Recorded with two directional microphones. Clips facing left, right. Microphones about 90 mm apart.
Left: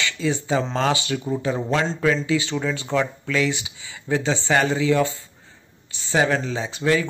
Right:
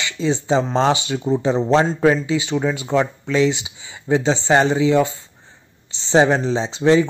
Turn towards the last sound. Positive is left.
turn(degrees=-25)  # may be behind; listen again after turning